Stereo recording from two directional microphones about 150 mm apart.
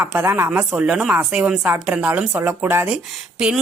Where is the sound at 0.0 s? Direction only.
15° right (ahead or behind).